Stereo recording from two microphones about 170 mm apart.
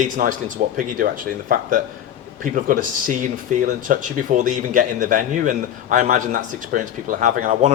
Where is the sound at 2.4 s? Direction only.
50° right (ahead or behind).